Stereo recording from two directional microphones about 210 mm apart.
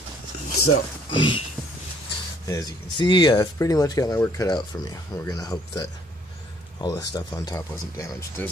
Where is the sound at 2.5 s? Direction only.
20° left (ahead or behind).